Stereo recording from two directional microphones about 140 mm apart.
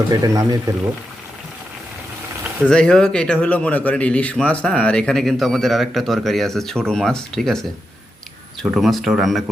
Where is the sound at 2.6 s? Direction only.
5° left (ahead or behind).